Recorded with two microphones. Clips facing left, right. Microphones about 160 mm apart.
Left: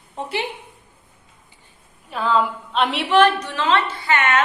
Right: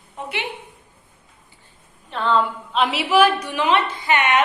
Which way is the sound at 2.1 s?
5° left (ahead or behind).